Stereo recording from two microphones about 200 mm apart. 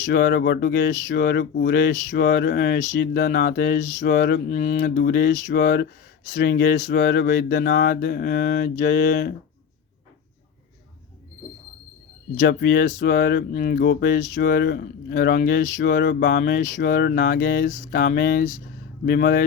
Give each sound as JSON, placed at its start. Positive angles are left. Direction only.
{"t": 0.1, "sound": "speech", "side_deg": 55}
{"t": 1.1, "sound": "mantra", "side_deg": 50}
{"t": 4.4, "sound": "mantra", "side_deg": 35}
{"t": 6.8, "sound": "speech", "side_deg": 55}
{"t": 7.3, "sound": "mantra", "side_deg": 45}
{"t": 12.5, "sound": "mantra", "side_deg": 55}
{"t": 13.5, "sound": "mantra", "side_deg": 45}
{"t": 13.8, "sound": "speech", "side_deg": 55}
{"t": 14.3, "sound": "mantra", "side_deg": 55}
{"t": 19.0, "sound": "speech", "side_deg": 55}